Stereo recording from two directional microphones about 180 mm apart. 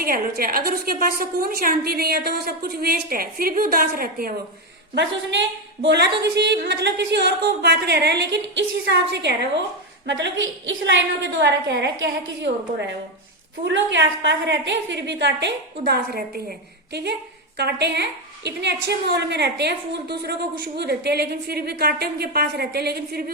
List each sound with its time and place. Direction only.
0.0 s a woman's voice: 55° right (ahead or behind)
5.8 s a woman's voice: 70° right (ahead or behind)
10.1 s a woman's voice: 90° right
13.7 s a woman's voice: 90° right; by 23.2 s 60° right (ahead or behind)